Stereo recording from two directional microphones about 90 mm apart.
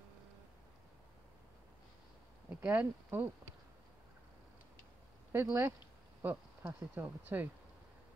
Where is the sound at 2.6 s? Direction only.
15° right (ahead or behind).